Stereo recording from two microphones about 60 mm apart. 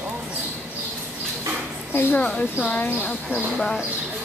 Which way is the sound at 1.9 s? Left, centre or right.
Left.